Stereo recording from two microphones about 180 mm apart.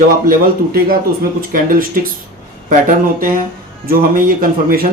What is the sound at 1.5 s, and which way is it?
Speech, 50° right (ahead or behind).